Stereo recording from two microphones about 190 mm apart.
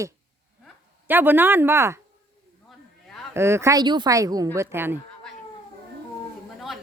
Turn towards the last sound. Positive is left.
turn(degrees=-10)  # may be behind; listen again after turning